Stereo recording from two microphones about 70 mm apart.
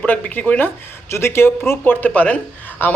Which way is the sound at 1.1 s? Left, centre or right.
Left.